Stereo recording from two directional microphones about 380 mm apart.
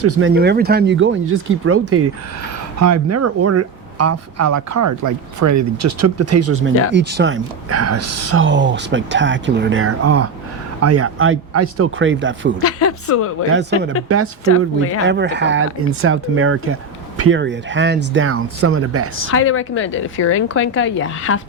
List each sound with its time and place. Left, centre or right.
0.0 s speech: right
6.9 s speech: right
12.6 s speech: left
13.5 s speech: right
14.4 s a woman's voice: left
15.0 s speech: right
19.3 s a woman's voice: left